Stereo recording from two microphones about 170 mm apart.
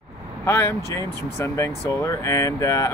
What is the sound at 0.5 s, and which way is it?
Speech, 15° left (ahead or behind).